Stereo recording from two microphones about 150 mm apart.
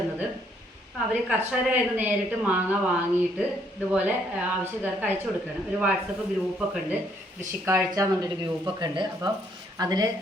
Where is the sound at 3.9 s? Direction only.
10° right (ahead or behind).